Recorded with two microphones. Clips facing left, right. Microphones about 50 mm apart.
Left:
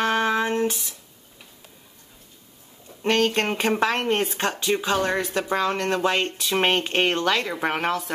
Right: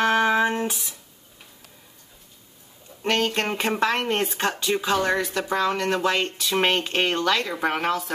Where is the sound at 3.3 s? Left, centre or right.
Centre.